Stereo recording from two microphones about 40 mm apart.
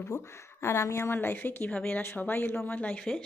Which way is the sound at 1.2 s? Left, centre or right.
Left.